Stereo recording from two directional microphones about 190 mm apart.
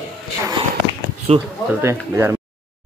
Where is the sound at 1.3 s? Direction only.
30° right (ahead or behind).